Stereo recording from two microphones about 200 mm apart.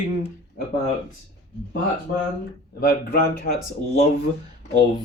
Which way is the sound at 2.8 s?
50° left (ahead or behind).